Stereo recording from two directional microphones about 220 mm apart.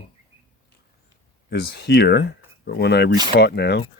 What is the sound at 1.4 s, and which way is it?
Speech, 45° left (ahead or behind).